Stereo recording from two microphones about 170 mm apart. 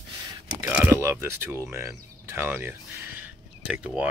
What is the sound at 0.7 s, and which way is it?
Speech, 15° right (ahead or behind).